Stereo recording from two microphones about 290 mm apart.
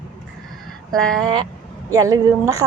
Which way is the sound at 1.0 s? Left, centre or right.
Centre.